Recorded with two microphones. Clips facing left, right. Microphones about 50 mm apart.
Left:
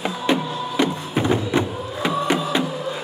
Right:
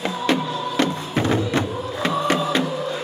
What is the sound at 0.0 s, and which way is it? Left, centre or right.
Music, centre.